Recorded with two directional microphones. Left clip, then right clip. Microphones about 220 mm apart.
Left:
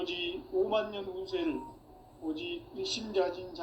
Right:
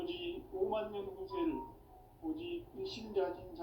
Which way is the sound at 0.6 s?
45° left (ahead or behind).